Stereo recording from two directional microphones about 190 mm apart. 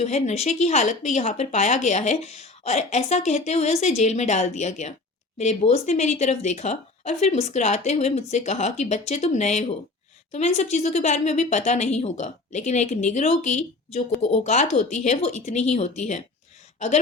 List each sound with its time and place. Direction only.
0.0 s speech: 35° left (ahead or behind)